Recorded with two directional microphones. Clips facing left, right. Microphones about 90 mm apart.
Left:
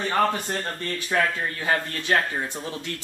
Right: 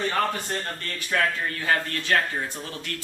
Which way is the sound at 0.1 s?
20° left (ahead or behind).